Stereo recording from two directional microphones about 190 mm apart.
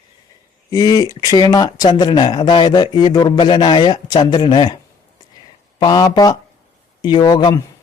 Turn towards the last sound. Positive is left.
turn(degrees=20)  # may be behind; listen again after turning